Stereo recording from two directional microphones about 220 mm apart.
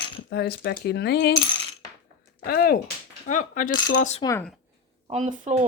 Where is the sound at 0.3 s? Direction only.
45° left (ahead or behind).